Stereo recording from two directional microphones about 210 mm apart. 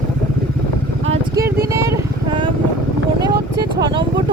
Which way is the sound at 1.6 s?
15° right (ahead or behind).